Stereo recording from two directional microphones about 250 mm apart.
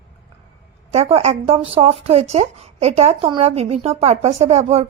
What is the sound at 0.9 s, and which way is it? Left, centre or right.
Speech, right.